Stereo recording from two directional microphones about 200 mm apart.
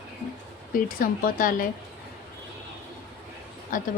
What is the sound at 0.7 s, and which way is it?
Speech, 45° left (ahead or behind).